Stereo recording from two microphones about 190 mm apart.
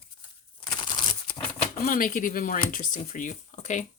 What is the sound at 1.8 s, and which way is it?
Speech, 45° left (ahead or behind).